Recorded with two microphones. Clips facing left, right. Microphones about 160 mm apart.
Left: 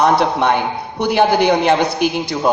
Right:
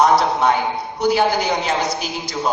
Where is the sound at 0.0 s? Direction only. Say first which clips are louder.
Left 1 dB; 65° left (ahead or behind).